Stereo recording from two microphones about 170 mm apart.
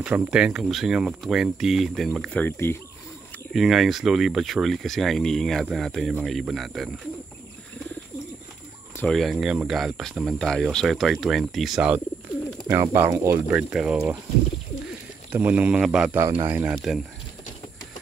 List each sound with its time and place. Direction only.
0.0 s speech: 5° right (ahead or behind); by 2.8 s 10° left (ahead or behind)
3.5 s speech: centre (ahead or behind)
8.9 s speech: 5° left (ahead or behind)
12.6 s speech: 15° right (ahead or behind)
13.5 s speech: 5° right (ahead or behind)